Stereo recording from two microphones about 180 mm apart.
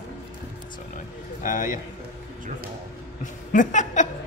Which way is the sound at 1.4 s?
45° left (ahead or behind).